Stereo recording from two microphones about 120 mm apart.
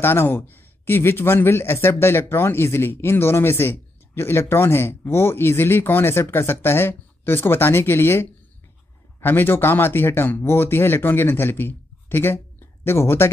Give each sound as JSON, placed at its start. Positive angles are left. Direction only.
{"t": 0.0, "sound": "speech", "side_deg": 20}